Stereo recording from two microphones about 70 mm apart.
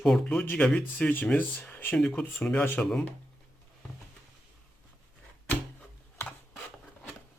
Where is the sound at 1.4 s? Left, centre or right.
Left.